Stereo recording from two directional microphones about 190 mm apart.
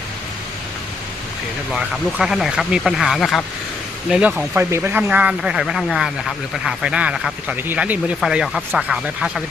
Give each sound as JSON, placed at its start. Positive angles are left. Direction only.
{"t": 1.7, "sound": "speech", "side_deg": 0}